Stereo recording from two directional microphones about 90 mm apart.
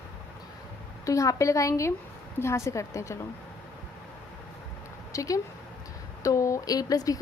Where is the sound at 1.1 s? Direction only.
35° left (ahead or behind).